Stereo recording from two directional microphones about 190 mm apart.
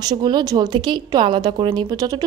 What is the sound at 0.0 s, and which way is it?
Speech, 20° right (ahead or behind).